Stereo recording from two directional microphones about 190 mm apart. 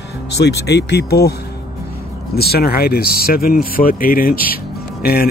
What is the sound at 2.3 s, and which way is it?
Speech, 55° left (ahead or behind).